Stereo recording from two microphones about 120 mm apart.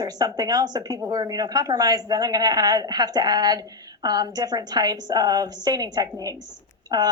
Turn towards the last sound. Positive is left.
turn(degrees=-30)  # may be behind; listen again after turning